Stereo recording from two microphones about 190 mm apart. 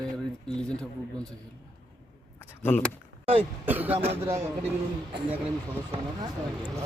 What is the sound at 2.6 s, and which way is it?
Speech, 10° left (ahead or behind).